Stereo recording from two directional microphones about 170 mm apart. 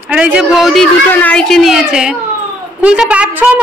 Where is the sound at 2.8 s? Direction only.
5° right (ahead or behind).